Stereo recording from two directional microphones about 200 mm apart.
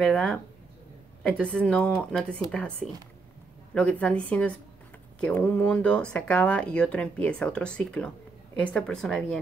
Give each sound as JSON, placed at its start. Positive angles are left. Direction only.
{"t": 0.0, "sound": "speech", "side_deg": 5}
{"t": 3.7, "sound": "speech", "side_deg": 5}